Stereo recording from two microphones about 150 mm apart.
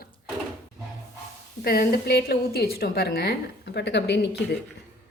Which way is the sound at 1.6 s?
90° left.